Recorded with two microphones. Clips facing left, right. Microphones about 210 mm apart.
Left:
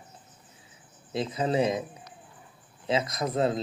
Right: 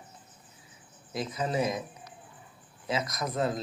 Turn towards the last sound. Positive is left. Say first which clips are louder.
# left 4 dB
turn(degrees=25)  # may be behind; listen again after turning